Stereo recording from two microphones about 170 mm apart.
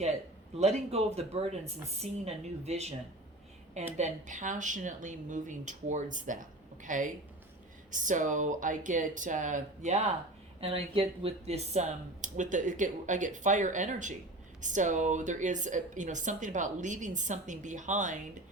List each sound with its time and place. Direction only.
0.6 s a woman's voice: 40° right (ahead or behind)
3.9 s speech: 45° right (ahead or behind)